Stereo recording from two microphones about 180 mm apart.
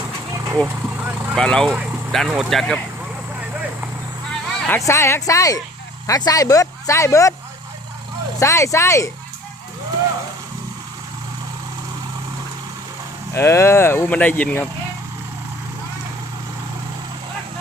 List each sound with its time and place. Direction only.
0.6 s vehicle: 10° right (ahead or behind)
1.4 s speech: 5° left (ahead or behind)
4.3 s a sound: 5° left (ahead or behind)
4.9 s speech: 15° left (ahead or behind)
8.4 s speech: 15° left (ahead or behind)
13.3 s speech: 15° left (ahead or behind)